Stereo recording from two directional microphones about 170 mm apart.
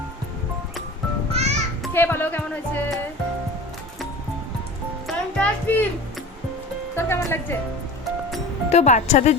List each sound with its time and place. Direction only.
1.3 s music: 40° right (ahead or behind)
1.9 s speech: 10° left (ahead or behind)
5.0 s music: 10° left (ahead or behind)
6.9 s music: 15° left (ahead or behind)
8.7 s speech: 40° left (ahead or behind)